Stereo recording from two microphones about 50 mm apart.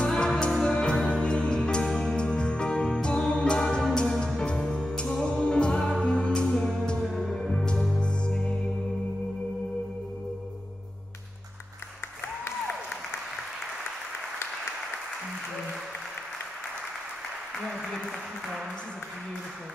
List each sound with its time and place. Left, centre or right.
0.0 s music: centre
0.9 s music: centre
1.2 s music: centre
2.1 s music: centre
7.0 s music: centre
17.6 s applause: centre